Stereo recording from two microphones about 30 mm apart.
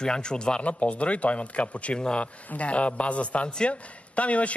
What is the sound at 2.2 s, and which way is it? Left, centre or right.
A man's voice, left.